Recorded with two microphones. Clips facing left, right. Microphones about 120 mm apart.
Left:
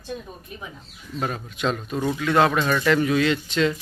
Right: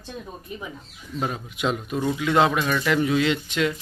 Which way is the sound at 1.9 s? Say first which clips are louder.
Even; centre (ahead or behind).